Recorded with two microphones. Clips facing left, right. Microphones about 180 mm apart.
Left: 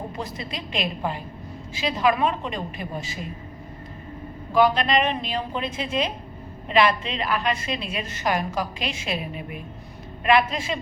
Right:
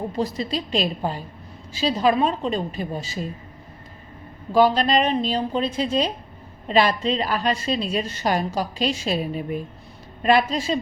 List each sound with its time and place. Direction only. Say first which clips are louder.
0.2 s a woman's voice: right 7 dB; 35° right (ahead or behind)
4.5 s a woman's voice: right 2 dB; 35° right (ahead or behind)